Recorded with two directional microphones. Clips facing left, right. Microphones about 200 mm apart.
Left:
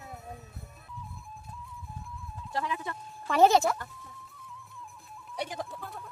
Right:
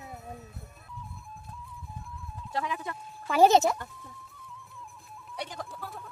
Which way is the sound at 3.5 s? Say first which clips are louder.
Right 2 dB; 20° right (ahead or behind).